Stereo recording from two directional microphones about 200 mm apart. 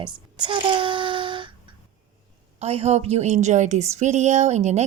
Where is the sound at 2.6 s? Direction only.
30° right (ahead or behind).